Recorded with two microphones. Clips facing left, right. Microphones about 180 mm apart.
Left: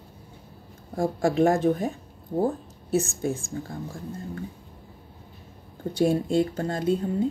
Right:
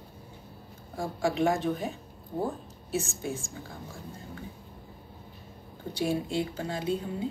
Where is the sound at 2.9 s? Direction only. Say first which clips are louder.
Left 7 dB; 50° left (ahead or behind).